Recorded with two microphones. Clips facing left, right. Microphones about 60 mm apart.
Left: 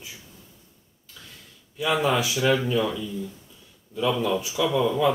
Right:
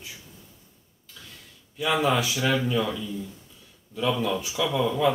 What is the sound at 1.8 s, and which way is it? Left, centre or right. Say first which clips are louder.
Speech: left 1 dB; centre.